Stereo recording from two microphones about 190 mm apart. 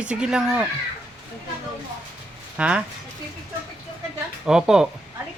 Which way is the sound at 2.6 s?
5° right (ahead or behind).